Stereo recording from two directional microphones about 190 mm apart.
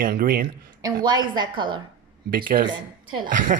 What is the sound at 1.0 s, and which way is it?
Speech, 20° right (ahead or behind).